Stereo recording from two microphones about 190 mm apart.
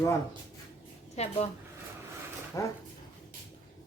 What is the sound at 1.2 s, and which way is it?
Speech, 35° left (ahead or behind).